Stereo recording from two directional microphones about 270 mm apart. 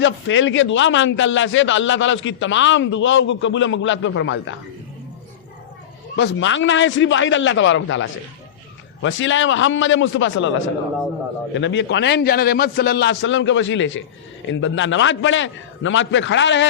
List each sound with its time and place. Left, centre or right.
0.0 s a man's voice: left
6.1 s a man's voice: left